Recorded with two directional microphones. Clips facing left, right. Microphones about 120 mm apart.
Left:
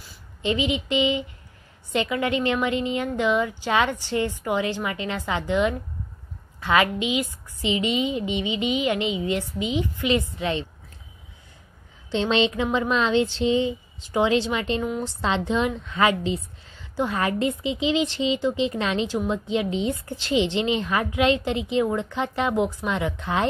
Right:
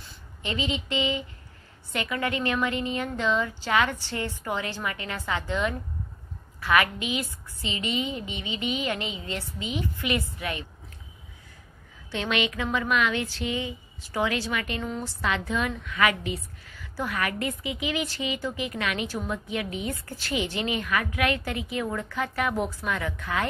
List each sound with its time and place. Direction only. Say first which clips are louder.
0.4 s a woman's voice: left 6 dB; 20° left (ahead or behind)
12.1 s a woman's voice: left 6 dB; 30° left (ahead or behind)
14.8 s a woman's voice: left 5 dB; 15° left (ahead or behind)
15.2 s a woman's voice: left 4 dB; 25° left (ahead or behind)